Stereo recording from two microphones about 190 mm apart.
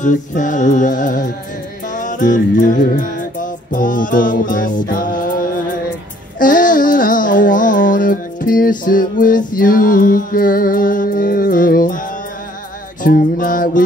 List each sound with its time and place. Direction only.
0.0 s music: 40° left (ahead or behind)
6.4 s a sound: 45° left (ahead or behind)
13.0 s music: 45° left (ahead or behind)